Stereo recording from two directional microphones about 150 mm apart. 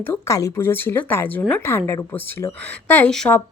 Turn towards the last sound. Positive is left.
turn(degrees=5)  # may be behind; listen again after turning